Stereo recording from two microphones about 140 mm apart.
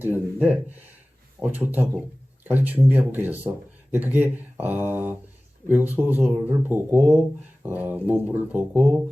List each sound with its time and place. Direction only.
0.0 s speech: 15° right (ahead or behind)